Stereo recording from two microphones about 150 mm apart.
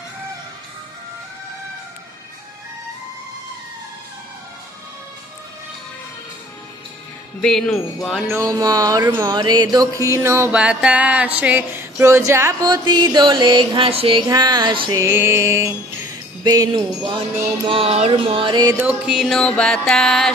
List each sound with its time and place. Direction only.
7.4 s music: 5° left (ahead or behind)
8.4 s music: 25° right (ahead or behind)
10.5 s a sound: 5° right (ahead or behind)
12.7 s music: 30° right (ahead or behind)
14.2 s music: 25° right (ahead or behind)
14.9 s music: 20° right (ahead or behind)
17.6 s music: 40° right (ahead or behind)
18.8 s music: 10° right (ahead or behind)